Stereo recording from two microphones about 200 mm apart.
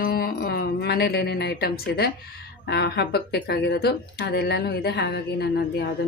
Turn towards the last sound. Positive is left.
turn(degrees=50)  # may be behind; listen again after turning